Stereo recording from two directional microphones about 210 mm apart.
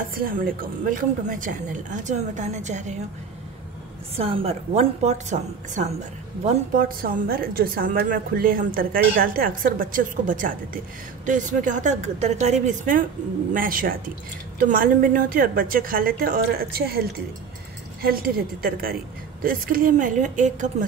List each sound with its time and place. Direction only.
0.1 s a woman's voice: 45° right (ahead or behind)
4.2 s a woman's voice: 25° right (ahead or behind); by 17.0 s 45° right (ahead or behind)
18.0 s a woman's voice: 45° right (ahead or behind)